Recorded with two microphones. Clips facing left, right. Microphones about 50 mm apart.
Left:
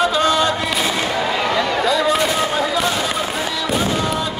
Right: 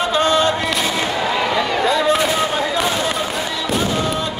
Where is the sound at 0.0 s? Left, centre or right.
Right.